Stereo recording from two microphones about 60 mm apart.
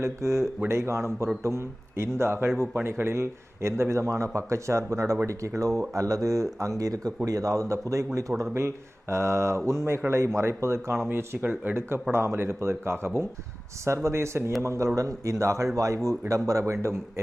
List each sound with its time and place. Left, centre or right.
0.0 s a man's voice: right
8.5 s speech: right
11.1 s a man's voice: right